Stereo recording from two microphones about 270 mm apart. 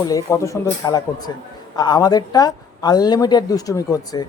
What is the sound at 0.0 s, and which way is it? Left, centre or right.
Speech, centre.